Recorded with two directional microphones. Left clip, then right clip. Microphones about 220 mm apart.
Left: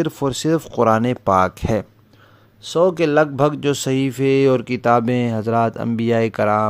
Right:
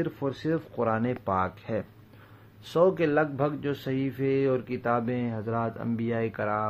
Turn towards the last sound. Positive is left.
turn(degrees=50)  # may be behind; listen again after turning